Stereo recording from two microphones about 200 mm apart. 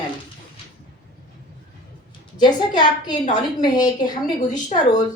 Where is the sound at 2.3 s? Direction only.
20° left (ahead or behind).